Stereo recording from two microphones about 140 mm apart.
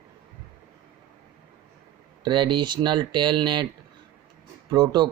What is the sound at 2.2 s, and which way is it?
Speech, 35° right (ahead or behind).